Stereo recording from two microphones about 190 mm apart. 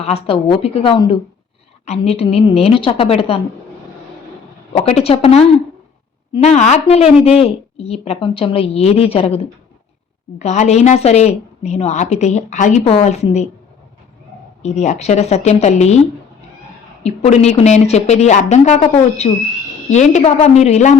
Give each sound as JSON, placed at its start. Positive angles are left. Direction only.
{"t": 0.0, "sound": "a woman's voice", "side_deg": 30}
{"t": 4.7, "sound": "a woman's voice", "side_deg": 30}
{"t": 14.6, "sound": "a woman's voice", "side_deg": 35}
{"t": 17.0, "sound": "a woman's voice", "side_deg": 35}